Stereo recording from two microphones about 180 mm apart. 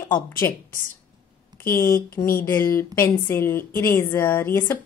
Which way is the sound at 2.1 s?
50° left (ahead or behind).